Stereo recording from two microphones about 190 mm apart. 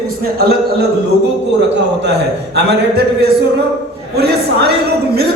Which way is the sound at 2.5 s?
60° right (ahead or behind).